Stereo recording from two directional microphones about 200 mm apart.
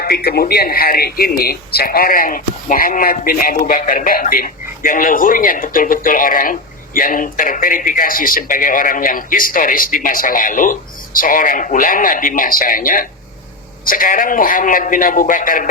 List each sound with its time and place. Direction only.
0.0 s a man's voice: 50° left (ahead or behind)